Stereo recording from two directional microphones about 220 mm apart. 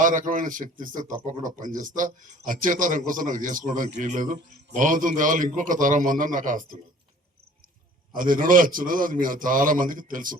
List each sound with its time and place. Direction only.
0.0 s a man's voice: 35° right (ahead or behind)
8.1 s a man's voice: 40° right (ahead or behind)